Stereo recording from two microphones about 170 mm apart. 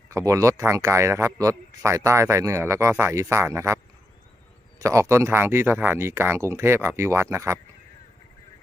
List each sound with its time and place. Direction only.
0.1 s speech: 20° right (ahead or behind)
4.8 s speech: 15° right (ahead or behind)